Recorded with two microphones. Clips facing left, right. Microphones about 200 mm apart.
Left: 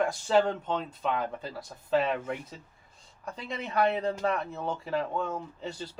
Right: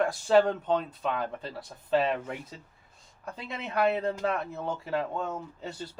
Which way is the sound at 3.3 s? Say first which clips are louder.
Left 1 dB; 60° right (ahead or behind).